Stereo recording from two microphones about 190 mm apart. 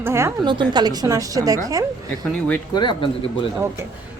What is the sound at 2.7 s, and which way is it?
Speech, 25° left (ahead or behind).